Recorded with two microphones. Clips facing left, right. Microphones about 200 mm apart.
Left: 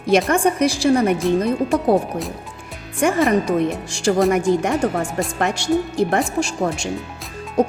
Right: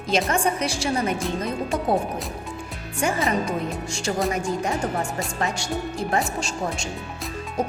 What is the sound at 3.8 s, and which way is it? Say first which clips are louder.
Speech: left 8 dB; 80° left.